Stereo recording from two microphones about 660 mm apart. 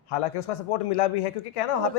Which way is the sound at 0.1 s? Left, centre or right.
Left.